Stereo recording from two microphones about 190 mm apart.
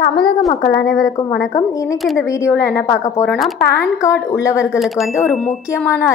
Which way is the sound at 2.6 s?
15° left (ahead or behind).